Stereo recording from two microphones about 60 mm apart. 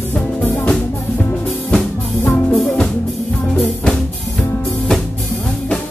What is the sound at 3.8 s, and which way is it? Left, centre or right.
Music, centre.